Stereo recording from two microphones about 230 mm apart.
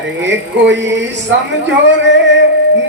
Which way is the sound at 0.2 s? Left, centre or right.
Right.